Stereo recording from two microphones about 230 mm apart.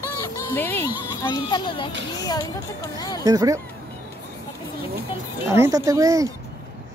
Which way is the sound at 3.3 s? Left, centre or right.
Centre.